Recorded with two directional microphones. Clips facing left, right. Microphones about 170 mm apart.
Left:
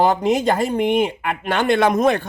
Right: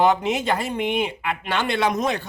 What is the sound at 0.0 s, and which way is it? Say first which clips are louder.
Speech: left 3 dB; 40° left (ahead or behind).